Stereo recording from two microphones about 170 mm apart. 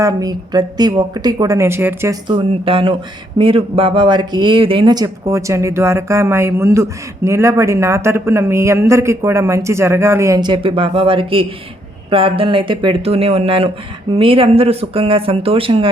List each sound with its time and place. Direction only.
0.0 s a woman's voice: 20° right (ahead or behind)
2.2 s a woman's voice: 30° right (ahead or behind)